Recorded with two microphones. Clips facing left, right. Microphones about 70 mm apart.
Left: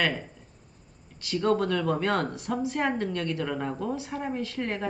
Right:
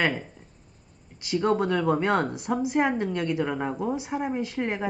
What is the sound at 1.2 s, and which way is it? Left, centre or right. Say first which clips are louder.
A woman's voice: right 1 dB; centre.